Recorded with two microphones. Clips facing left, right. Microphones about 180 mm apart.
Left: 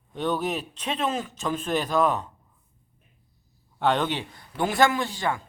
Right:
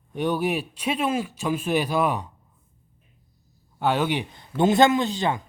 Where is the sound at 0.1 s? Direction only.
10° right (ahead or behind).